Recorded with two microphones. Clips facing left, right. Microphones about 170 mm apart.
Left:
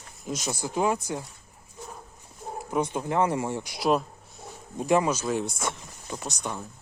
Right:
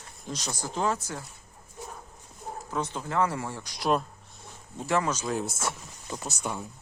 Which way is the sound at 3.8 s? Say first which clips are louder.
Left 2 dB; centre (ahead or behind).